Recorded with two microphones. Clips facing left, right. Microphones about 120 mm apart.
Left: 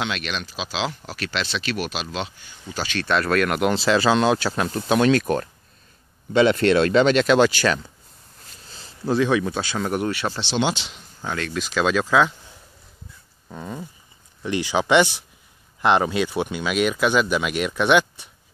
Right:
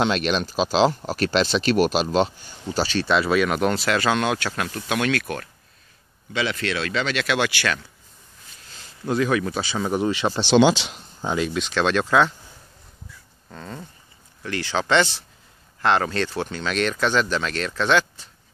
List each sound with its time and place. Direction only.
0.0 s speech: 40° right (ahead or behind)
3.1 s speech: centre (ahead or behind)
3.7 s speech: 25° left (ahead or behind)
6.3 s speech: 45° left (ahead or behind)
9.0 s speech: centre (ahead or behind)
10.2 s speech: 15° right (ahead or behind)
11.5 s speech: 5° left (ahead or behind)
13.5 s speech: 10° left (ahead or behind)